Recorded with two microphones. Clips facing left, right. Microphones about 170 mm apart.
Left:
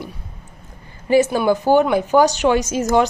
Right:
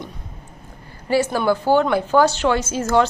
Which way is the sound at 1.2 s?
15° left (ahead or behind).